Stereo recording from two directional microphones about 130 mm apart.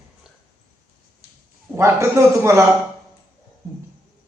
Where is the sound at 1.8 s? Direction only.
20° right (ahead or behind).